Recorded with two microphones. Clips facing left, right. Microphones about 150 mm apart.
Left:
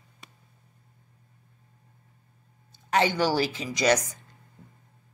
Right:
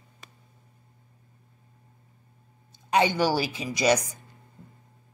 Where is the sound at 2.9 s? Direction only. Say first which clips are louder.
Right 1 dB; 15° right (ahead or behind).